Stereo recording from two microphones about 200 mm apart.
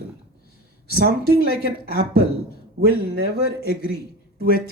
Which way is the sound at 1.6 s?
50° right (ahead or behind).